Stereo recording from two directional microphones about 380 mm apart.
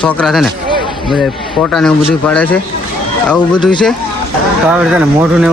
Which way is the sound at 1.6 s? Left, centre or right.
Centre.